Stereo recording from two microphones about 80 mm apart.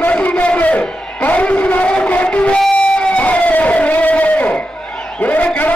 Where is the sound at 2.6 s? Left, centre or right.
Centre.